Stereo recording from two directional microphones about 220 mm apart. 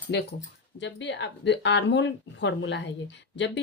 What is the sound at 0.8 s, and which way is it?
Speech, 55° left (ahead or behind).